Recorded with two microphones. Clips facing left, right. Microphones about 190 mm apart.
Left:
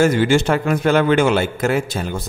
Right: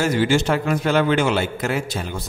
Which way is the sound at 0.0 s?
50° left (ahead or behind).